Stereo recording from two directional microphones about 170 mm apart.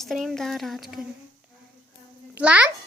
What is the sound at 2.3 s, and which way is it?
Speech, 5° right (ahead or behind).